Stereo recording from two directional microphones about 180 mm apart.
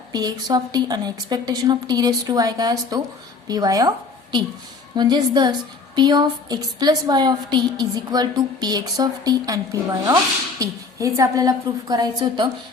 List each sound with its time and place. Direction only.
0.1 s a woman's voice: 20° right (ahead or behind)
10.6 s a woman's voice: 20° right (ahead or behind)